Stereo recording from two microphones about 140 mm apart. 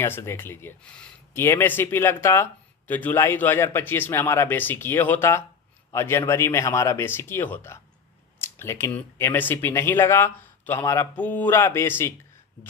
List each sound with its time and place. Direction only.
0.0 s speech: 15° left (ahead or behind)